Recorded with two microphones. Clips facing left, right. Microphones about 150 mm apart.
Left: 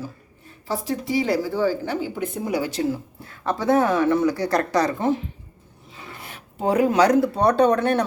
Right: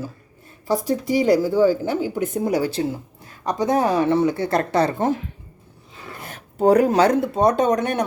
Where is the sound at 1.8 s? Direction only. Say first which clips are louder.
Right 4 dB; 45° right (ahead or behind).